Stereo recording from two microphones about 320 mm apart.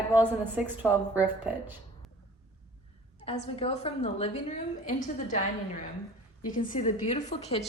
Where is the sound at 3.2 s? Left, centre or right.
Centre.